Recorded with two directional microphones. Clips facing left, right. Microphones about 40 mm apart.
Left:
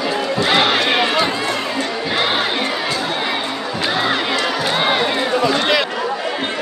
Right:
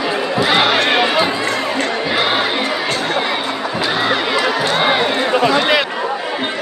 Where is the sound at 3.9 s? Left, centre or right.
Centre.